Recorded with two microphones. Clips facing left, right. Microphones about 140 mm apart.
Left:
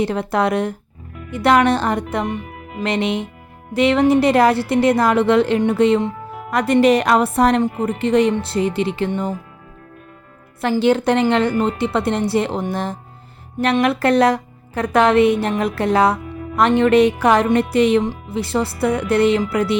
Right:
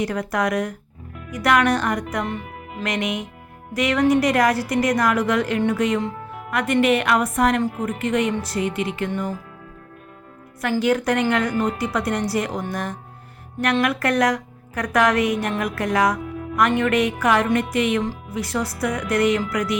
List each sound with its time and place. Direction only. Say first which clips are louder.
0.0 s a woman's voice: left 4 dB; 25° left (ahead or behind)
2.2 s speech: left 4 dB; 15° left (ahead or behind)
2.8 s a woman's voice: left 5 dB; 30° left (ahead or behind)
10.6 s a woman's voice: left 4 dB; 30° left (ahead or behind)